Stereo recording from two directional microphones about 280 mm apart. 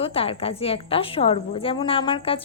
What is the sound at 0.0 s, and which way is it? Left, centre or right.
A woman's voice, centre.